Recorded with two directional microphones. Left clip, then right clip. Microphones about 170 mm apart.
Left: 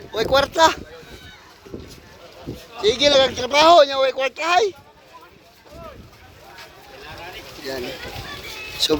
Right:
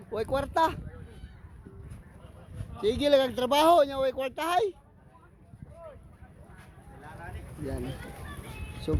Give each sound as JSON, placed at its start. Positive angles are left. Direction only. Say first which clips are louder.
{"t": 0.1, "sound": "speech", "louder": "left 11 dB", "side_deg": 0}
{"t": 2.8, "sound": "speech", "louder": "left 8 dB", "side_deg": -25}
{"t": 8.8, "sound": "speech", "louder": "left 14 dB", "side_deg": 20}